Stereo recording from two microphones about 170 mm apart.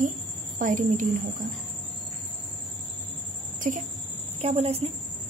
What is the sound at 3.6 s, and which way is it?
Speech, 50° right (ahead or behind).